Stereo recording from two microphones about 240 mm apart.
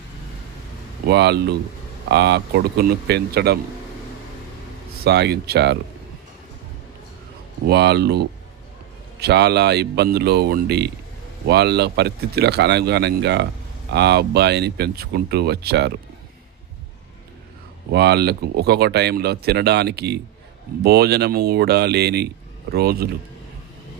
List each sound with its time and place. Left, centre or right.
1.0 s speech: right
5.0 s speech: right
7.7 s speech: right
9.2 s speech: right
17.9 s speech: right